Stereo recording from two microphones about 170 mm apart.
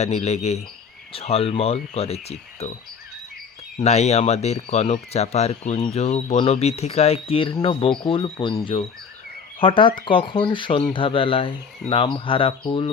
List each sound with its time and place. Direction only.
0.0 s speech: 40° left (ahead or behind)
3.8 s speech: 40° left (ahead or behind)